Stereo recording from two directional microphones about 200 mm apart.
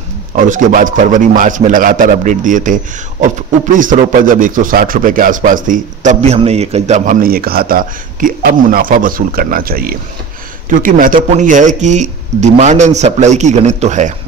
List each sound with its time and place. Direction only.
0.4 s a man's voice: 40° right (ahead or behind)